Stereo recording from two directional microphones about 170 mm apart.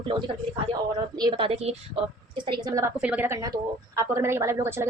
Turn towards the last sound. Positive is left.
turn(degrees=-15)  # may be behind; listen again after turning